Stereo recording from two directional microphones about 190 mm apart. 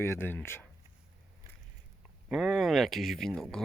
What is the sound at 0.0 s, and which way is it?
Speech, 10° left (ahead or behind).